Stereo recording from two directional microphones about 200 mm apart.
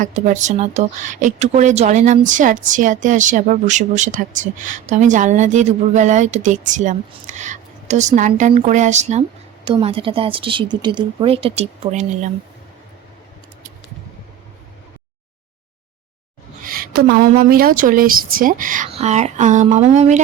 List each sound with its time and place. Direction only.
0.0 s speech: 35° right (ahead or behind)
16.6 s a woman's voice: 45° right (ahead or behind)